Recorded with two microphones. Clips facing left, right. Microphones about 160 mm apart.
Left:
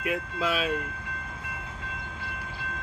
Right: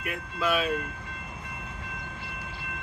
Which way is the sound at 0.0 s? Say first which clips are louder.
Left 2 dB; 90° left.